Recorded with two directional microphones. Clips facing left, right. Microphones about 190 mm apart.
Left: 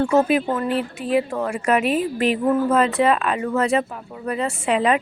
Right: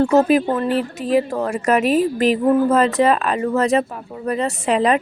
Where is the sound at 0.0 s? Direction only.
40° right (ahead or behind).